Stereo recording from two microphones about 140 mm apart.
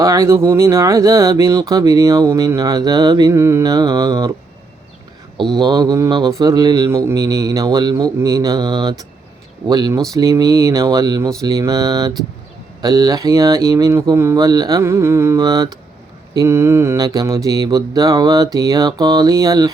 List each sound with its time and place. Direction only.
0.0 s speech: 20° right (ahead or behind)
5.5 s speech: 30° right (ahead or behind)